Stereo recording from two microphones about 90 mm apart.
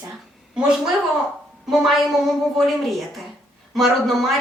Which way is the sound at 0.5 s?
10° right (ahead or behind).